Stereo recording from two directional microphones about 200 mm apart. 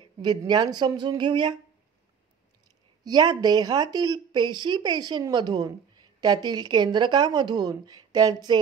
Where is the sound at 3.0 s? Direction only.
20° right (ahead or behind).